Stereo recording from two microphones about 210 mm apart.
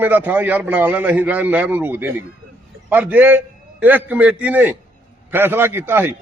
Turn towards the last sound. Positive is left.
turn(degrees=-10)  # may be behind; listen again after turning